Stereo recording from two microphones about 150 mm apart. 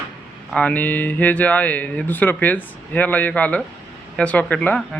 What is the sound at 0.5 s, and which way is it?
Speech, 10° left (ahead or behind).